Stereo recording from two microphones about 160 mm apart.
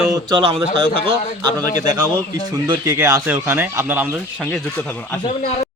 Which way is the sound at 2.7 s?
20° right (ahead or behind).